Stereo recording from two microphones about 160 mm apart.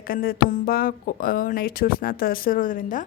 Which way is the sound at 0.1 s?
65° left (ahead or behind).